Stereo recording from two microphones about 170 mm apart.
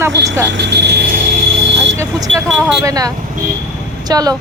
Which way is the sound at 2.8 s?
20° right (ahead or behind).